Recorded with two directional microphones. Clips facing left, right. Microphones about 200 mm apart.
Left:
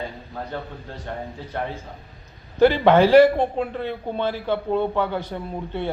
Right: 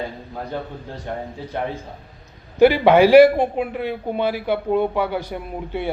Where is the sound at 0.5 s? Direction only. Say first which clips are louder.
Right 3 dB; 15° right (ahead or behind).